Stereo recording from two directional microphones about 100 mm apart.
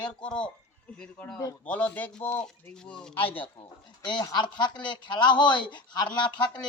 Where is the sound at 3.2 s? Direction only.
65° left (ahead or behind).